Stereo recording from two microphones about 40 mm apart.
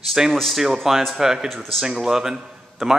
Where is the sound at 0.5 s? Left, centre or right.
Centre.